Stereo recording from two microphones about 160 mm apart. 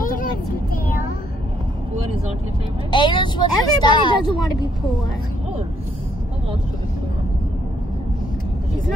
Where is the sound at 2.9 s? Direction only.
30° left (ahead or behind).